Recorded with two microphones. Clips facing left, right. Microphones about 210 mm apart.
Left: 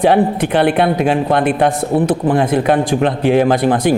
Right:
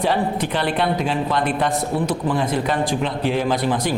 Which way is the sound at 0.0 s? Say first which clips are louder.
Left 8 dB; 60° left (ahead or behind).